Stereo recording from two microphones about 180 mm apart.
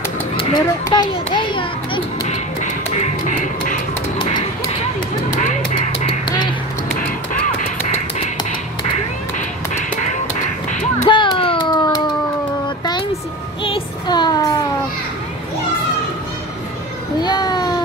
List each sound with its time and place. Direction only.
0.4 s children playing: 25° left (ahead or behind)
2.2 s music: 40° left (ahead or behind)
5.3 s honk: 45° left (ahead or behind)
5.9 s music: 30° left (ahead or behind)
7.0 s music: 45° left (ahead or behind)
10.7 s music: 45° left (ahead or behind)
11.1 s a sound: 25° left (ahead or behind)
13.7 s child singing: 25° left (ahead or behind)
17.2 s a sound: 25° left (ahead or behind)